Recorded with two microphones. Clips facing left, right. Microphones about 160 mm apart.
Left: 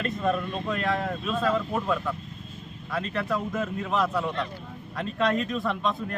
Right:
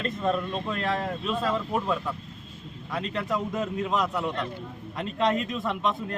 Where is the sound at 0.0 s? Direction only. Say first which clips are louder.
Even; 30° right (ahead or behind).